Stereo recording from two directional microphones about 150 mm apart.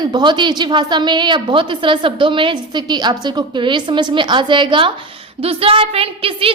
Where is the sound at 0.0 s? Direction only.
30° right (ahead or behind).